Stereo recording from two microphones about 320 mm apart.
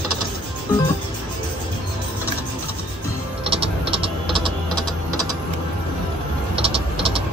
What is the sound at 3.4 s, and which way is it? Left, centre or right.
Typing, centre.